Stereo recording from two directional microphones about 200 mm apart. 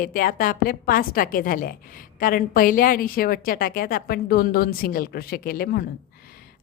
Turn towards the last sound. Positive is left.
turn(degrees=45)  # may be behind; listen again after turning